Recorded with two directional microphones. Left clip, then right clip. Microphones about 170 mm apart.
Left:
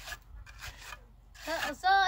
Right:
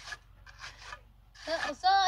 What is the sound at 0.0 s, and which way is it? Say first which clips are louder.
Filing: even; 45° left (ahead or behind).